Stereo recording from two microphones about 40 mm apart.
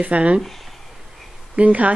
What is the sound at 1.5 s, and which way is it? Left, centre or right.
Speech, right.